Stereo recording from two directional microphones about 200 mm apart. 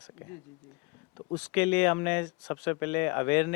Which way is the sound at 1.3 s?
5° left (ahead or behind).